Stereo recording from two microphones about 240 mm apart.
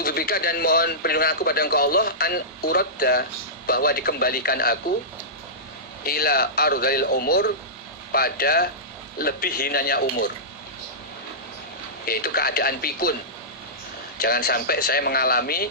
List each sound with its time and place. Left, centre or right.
0.0 s speech: left
6.1 s speech: left
12.0 s speech: left
14.2 s speech: left